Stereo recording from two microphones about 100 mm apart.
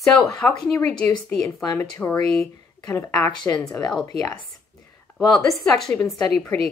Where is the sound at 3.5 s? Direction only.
25° left (ahead or behind).